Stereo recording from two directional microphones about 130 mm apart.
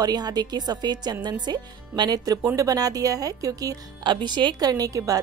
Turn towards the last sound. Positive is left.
turn(degrees=-25)  # may be behind; listen again after turning